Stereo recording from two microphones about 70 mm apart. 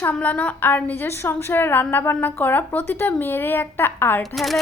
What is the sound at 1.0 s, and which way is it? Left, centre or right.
A woman's voice, left.